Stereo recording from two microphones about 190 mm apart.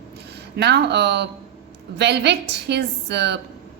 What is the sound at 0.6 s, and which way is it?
A woman's voice, 60° right (ahead or behind).